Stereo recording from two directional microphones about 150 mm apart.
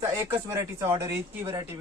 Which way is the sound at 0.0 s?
20° right (ahead or behind).